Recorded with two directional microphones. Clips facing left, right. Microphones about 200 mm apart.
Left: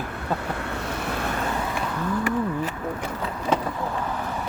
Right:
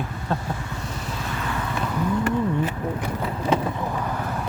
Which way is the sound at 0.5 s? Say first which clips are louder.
Left 3 dB; 65° left (ahead or behind).